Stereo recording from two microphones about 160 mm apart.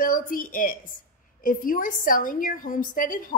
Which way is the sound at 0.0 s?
60° left (ahead or behind).